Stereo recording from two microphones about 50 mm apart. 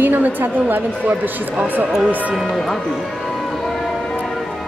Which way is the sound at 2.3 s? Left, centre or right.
Centre.